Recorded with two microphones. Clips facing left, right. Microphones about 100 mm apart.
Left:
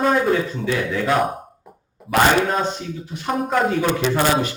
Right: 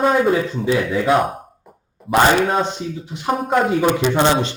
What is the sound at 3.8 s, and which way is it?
Speech, 15° right (ahead or behind).